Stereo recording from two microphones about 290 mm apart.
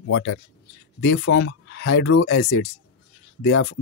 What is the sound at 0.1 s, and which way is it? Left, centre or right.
Speech, left.